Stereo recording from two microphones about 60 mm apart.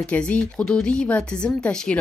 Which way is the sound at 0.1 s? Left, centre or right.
Left.